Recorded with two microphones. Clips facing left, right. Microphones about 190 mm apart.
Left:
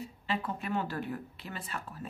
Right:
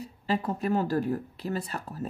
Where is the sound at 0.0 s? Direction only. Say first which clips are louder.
Right 6 dB; 40° right (ahead or behind).